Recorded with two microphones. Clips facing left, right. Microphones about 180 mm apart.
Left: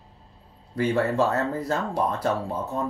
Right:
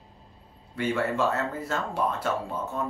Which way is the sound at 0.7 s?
35° left (ahead or behind).